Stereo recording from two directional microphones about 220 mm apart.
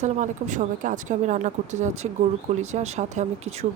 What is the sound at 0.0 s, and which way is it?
A woman's voice, 35° right (ahead or behind).